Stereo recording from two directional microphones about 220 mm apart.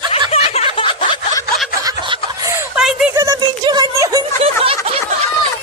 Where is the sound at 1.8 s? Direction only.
15° right (ahead or behind).